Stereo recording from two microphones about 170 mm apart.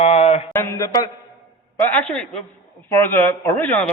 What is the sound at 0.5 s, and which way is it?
Speech, 15° left (ahead or behind).